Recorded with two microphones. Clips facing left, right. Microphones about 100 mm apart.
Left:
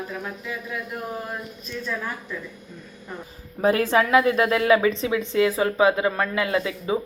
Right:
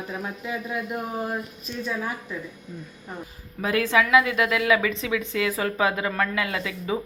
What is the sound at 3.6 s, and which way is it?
A woman's voice, 35° left (ahead or behind).